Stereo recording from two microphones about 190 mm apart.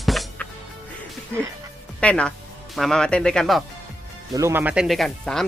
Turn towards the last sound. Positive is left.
turn(degrees=0)  # may be behind; listen again after turning